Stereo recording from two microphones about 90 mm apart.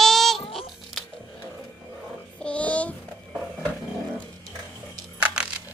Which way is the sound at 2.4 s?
15° left (ahead or behind).